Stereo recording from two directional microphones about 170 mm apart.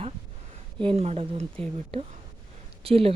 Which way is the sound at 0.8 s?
35° right (ahead or behind).